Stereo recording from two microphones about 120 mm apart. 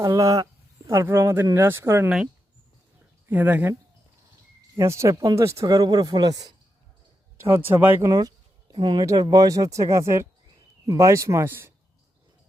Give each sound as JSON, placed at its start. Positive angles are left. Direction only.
{"t": 0.0, "sound": "speech", "side_deg": -30}
{"t": 2.0, "sound": "speech", "side_deg": -10}
{"t": 4.8, "sound": "speech", "side_deg": -25}
{"t": 7.3, "sound": "speech", "side_deg": -20}
{"t": 8.0, "sound": "speech", "side_deg": -30}
{"t": 9.3, "sound": "speech", "side_deg": -30}